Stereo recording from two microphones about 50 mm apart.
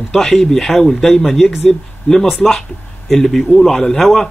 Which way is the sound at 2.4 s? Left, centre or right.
Centre.